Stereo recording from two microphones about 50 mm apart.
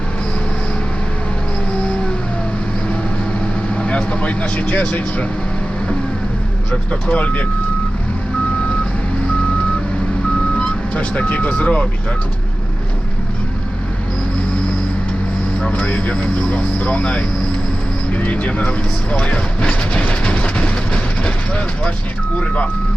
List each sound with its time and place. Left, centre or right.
3.8 s speech: left
7.1 s speech: left
10.6 s speech: left
15.6 s speech: left
19.1 s train: left
22.4 s speech: left